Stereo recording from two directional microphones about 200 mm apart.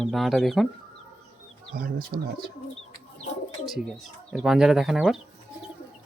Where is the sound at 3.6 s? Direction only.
Centre (ahead or behind).